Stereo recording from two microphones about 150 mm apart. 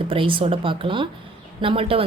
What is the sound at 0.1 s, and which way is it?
A woman's voice, 35° right (ahead or behind).